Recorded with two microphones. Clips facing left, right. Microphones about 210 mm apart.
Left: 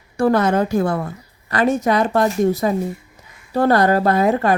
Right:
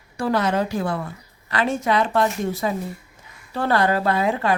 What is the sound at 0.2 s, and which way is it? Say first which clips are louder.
A woman's voice: left 5 dB; 50° left (ahead or behind).